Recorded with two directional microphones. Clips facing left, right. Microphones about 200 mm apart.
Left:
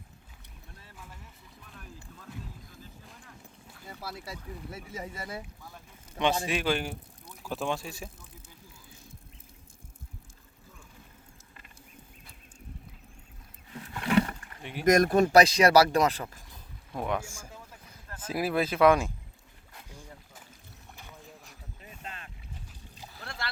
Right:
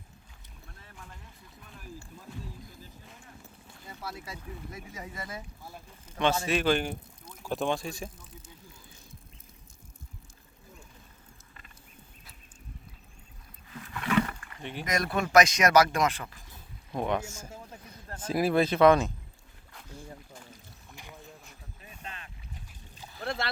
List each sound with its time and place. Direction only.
1.6 s boat: centre (ahead or behind)
4.7 s a man's voice: 30° left (ahead or behind)
6.1 s speech: 15° left (ahead or behind)
13.7 s roaring cats: 30° left (ahead or behind)
14.6 s speech: 5° left (ahead or behind)
14.8 s a man's voice: 45° left (ahead or behind)
17.0 s speech: centre (ahead or behind)
19.7 s a sound: 15° left (ahead or behind)
20.9 s boat: 15° right (ahead or behind)
23.2 s rowboat: 25° right (ahead or behind)